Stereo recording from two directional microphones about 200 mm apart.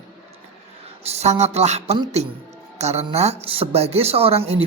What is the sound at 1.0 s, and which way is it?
Speech, 35° right (ahead or behind).